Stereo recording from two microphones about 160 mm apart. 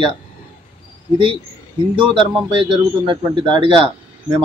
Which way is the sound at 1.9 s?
30° right (ahead or behind).